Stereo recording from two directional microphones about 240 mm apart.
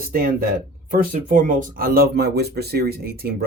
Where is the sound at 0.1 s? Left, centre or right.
Right.